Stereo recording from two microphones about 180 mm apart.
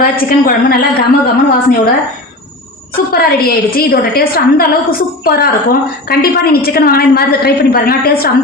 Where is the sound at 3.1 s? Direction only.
55° left (ahead or behind).